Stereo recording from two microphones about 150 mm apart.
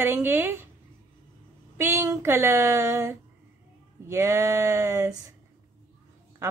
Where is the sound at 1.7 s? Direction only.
15° right (ahead or behind).